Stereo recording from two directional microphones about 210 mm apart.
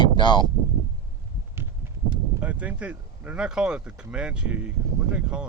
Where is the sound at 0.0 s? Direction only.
20° left (ahead or behind).